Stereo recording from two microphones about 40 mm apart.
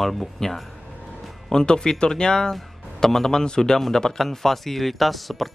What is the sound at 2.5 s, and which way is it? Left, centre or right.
Speech, centre.